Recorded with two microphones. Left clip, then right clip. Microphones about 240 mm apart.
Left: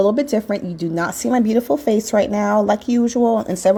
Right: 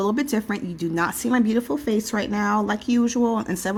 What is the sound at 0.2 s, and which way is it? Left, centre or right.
Speech, centre.